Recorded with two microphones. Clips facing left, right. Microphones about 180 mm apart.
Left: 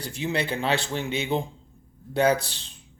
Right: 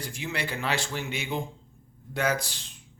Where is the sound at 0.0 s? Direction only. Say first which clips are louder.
Left 6 dB; 30° left (ahead or behind).